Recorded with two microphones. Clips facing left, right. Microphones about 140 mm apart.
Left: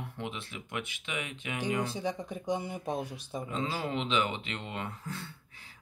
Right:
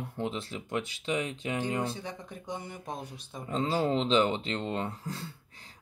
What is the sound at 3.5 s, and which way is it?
Speech, 40° right (ahead or behind).